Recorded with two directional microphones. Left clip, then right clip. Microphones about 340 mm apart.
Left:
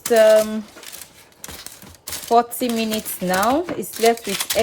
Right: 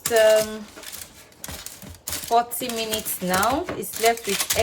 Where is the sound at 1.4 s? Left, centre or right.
Centre.